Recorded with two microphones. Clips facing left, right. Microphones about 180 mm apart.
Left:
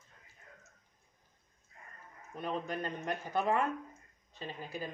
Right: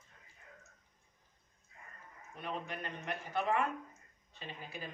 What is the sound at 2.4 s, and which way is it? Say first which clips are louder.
Speech: left 5 dB; 40° left (ahead or behind).